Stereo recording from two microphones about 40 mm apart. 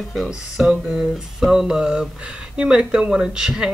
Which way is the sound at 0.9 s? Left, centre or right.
Centre.